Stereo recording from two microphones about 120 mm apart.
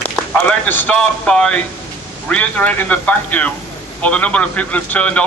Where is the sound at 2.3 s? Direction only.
10° left (ahead or behind).